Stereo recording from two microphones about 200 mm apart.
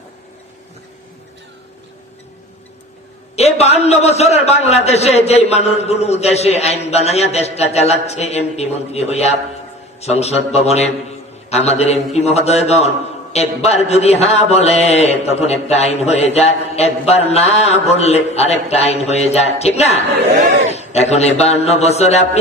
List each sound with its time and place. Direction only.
3.3 s a man's voice: 30° left (ahead or behind)